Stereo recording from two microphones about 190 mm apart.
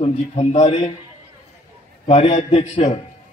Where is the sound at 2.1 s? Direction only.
35° left (ahead or behind).